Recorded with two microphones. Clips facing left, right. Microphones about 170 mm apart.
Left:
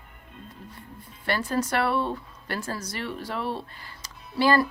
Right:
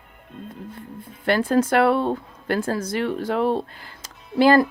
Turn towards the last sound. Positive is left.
turn(degrees=-50)  # may be behind; listen again after turning